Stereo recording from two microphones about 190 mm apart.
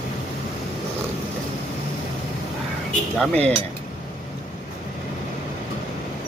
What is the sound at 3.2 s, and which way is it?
Speech, 5° left (ahead or behind).